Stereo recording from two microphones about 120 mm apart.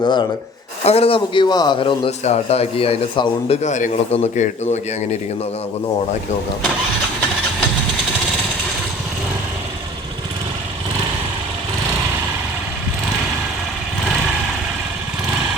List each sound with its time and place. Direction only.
0.0 s speech: 40° left (ahead or behind)
0.9 s a man's voice: 55° left (ahead or behind)
2.0 s a man's voice: 60° left (ahead or behind)